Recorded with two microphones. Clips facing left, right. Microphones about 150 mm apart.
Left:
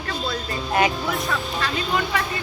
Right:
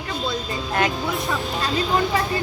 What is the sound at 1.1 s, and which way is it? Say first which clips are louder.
Speech: right 1 dB; 20° right (ahead or behind).